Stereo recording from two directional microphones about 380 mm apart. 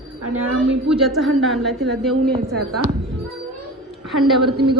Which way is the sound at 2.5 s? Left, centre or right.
Right.